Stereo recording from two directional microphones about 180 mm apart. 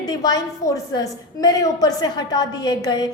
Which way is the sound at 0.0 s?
20° left (ahead or behind).